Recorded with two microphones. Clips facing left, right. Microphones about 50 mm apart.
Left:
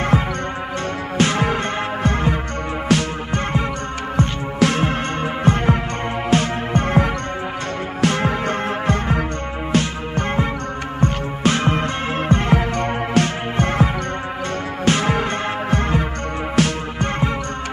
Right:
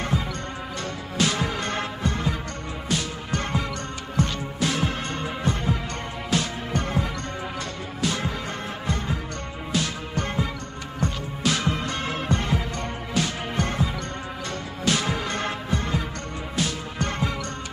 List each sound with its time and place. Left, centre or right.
0.1 s music: left
1.1 s music: left
2.9 s music: left
4.2 s music: left
9.7 s music: left
12.5 s music: left
14.9 s music: left
16.6 s music: left